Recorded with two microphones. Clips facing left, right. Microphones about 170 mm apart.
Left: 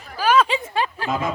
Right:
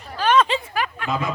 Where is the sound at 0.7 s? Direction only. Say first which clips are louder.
Left 2 dB; 30° left (ahead or behind).